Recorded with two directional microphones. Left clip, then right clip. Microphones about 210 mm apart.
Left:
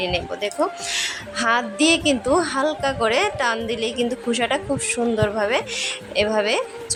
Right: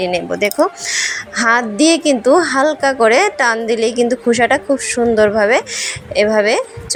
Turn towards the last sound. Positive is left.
turn(degrees=-20)  # may be behind; listen again after turning